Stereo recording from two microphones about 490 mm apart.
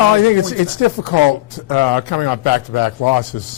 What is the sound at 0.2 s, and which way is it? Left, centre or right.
Speech, left.